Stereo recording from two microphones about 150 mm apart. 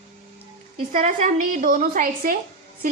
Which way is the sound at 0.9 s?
55° right (ahead or behind).